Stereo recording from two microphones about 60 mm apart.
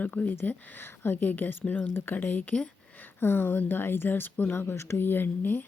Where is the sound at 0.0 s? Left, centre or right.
Left.